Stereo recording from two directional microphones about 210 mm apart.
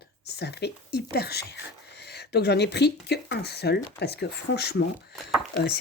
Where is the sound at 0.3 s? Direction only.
50° left (ahead or behind).